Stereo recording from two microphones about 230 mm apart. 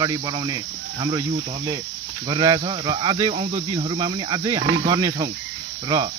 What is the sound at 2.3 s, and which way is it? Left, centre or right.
Speech, centre.